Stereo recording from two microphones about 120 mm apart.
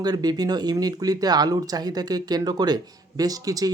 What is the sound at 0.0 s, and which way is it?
Speech, 35° right (ahead or behind).